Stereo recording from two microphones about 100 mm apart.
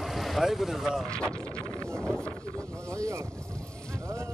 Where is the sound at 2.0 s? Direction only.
5° left (ahead or behind).